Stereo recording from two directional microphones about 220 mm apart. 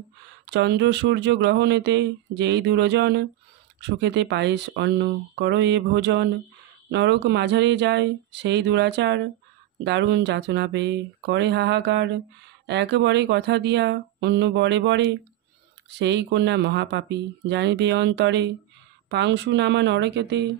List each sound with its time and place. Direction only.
0.5 s speech: 50° right (ahead or behind)